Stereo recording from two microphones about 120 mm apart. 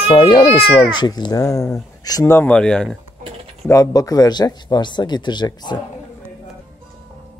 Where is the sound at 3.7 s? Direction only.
25° left (ahead or behind).